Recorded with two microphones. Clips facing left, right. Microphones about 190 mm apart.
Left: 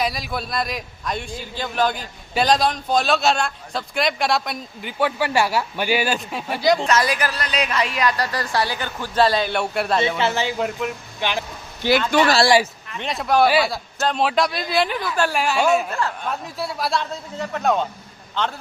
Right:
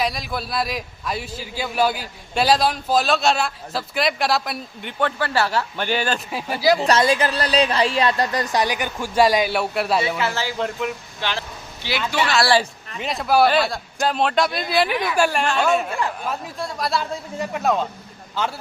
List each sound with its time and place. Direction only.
0.0 s a man's voice: centre (ahead or behind)
6.1 s a man's voice: centre (ahead or behind)
6.8 s a woman's voice: 30° right (ahead or behind); by 10.0 s centre (ahead or behind)
10.2 s speech: 25° left (ahead or behind)
10.6 s a man's voice: centre (ahead or behind)
11.2 s speech: 15° left (ahead or behind)
11.8 s speech: 50° left (ahead or behind)
13.0 s a man's voice: centre (ahead or behind)
15.9 s speech: 15° right (ahead or behind)
16.2 s a man's voice: centre (ahead or behind)
17.3 s speech: 10° right (ahead or behind)